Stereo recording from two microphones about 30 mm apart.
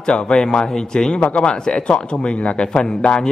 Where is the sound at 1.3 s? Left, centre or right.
Left.